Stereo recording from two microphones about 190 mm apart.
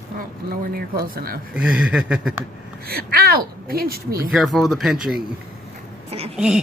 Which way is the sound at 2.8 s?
55° right (ahead or behind).